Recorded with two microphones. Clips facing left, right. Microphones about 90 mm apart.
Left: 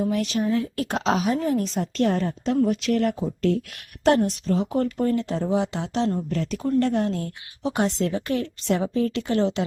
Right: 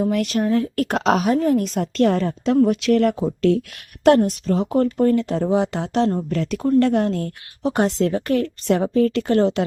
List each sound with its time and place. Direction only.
0.0 s a woman's voice: 60° right (ahead or behind); by 3.2 s 90° right
4.3 s a woman's voice: 60° right (ahead or behind)
6.3 s speech: 70° right (ahead or behind)
7.6 s a woman's voice: 50° right (ahead or behind)